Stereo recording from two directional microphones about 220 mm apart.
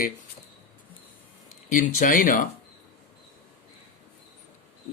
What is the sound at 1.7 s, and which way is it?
Speech, 35° left (ahead or behind).